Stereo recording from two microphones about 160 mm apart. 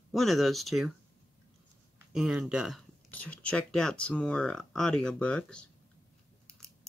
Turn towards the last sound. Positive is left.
turn(degrees=5)  # may be behind; listen again after turning